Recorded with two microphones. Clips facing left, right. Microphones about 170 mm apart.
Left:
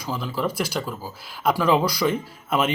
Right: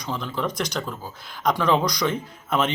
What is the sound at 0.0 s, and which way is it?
Speech, 5° left (ahead or behind).